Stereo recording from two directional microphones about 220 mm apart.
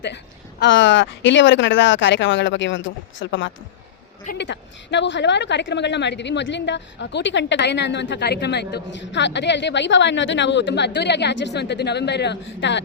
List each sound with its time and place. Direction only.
0.6 s a woman's voice: 55° left (ahead or behind)